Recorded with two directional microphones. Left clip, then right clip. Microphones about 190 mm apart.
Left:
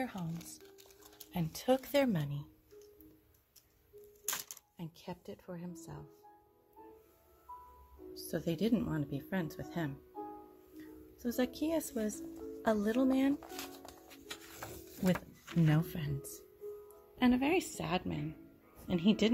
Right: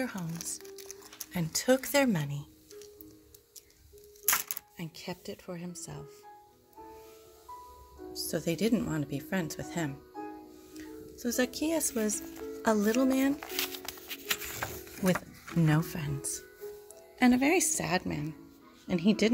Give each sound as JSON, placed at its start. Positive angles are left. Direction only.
{"t": 0.0, "sound": "speech", "side_deg": -5}
{"t": 4.3, "sound": "a sound", "side_deg": 5}
{"t": 4.7, "sound": "speech", "side_deg": -15}
{"t": 8.1, "sound": "speech", "side_deg": -5}
{"t": 13.6, "sound": "music", "side_deg": -5}
{"t": 15.6, "sound": "speech", "side_deg": -15}